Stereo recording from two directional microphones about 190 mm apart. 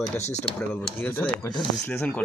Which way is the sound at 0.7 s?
10° left (ahead or behind).